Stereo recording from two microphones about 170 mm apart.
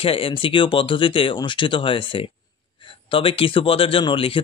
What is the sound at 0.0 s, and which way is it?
Speech, 35° left (ahead or behind).